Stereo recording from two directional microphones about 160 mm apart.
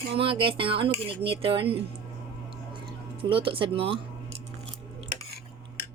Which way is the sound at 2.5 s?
30° right (ahead or behind).